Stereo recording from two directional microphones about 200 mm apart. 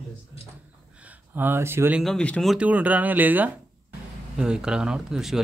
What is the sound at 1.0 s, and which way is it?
Speech, 10° right (ahead or behind).